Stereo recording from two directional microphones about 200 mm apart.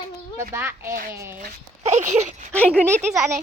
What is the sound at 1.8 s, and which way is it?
Speech, 35° right (ahead or behind).